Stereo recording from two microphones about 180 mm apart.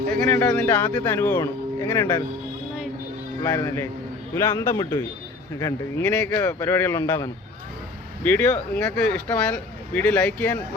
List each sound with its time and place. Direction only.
0.1 s speech: 5° left (ahead or behind)
3.4 s speech: 15° left (ahead or behind)